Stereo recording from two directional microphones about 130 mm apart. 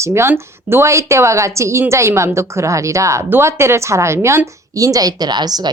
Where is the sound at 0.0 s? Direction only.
20° right (ahead or behind).